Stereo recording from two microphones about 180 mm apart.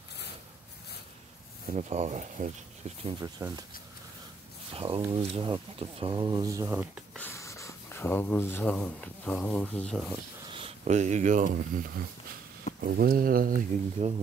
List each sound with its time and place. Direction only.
1.8 s speech: 35° right (ahead or behind)
3.0 s speech: 25° right (ahead or behind)
4.7 s speech: 30° right (ahead or behind); by 7.1 s 10° right (ahead or behind)
7.2 s speech: 15° left (ahead or behind)
10.4 s speech: 30° right (ahead or behind); by 13.6 s 50° right (ahead or behind)
14.0 s speech: 35° right (ahead or behind)